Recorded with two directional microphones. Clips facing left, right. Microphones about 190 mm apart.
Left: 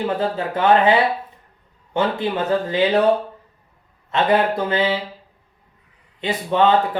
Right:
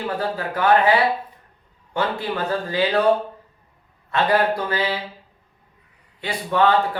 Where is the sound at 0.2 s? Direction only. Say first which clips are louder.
Left 3 dB; 25° left (ahead or behind).